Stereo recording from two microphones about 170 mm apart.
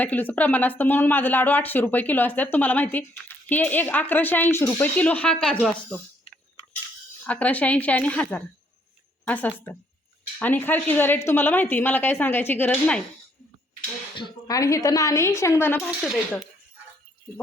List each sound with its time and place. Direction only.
0.0 s speech: 10° left (ahead or behind)
7.3 s speech: 10° left (ahead or behind)
14.2 s a woman's voice: 25° left (ahead or behind)
16.0 s speech: centre (ahead or behind)